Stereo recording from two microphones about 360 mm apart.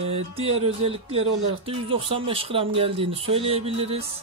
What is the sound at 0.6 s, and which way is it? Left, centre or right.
Speech, centre.